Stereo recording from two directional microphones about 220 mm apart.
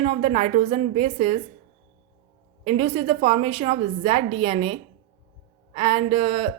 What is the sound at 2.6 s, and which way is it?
Speech, 30° right (ahead or behind).